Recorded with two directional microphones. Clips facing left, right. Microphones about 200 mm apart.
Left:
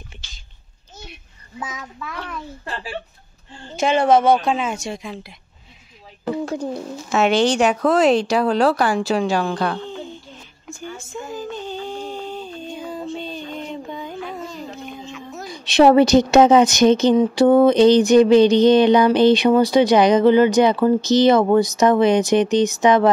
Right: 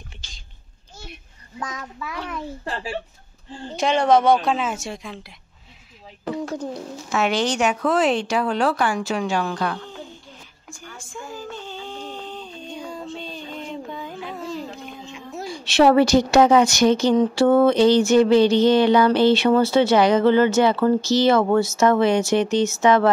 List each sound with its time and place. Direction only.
1.6 s a woman's voice: centre (ahead or behind)
3.7 s a woman's voice: 5° left (ahead or behind)
6.6 s speech: 25° left (ahead or behind)
10.7 s a sound: 25° left (ahead or behind); by 15.0 s centre (ahead or behind)
15.4 s a woman's voice: 20° left (ahead or behind)
17.2 s a sound: 15° left (ahead or behind)